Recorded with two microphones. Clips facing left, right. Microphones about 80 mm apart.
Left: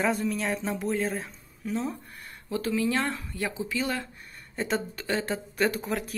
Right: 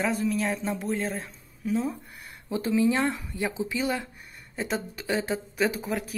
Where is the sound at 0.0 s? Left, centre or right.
Centre.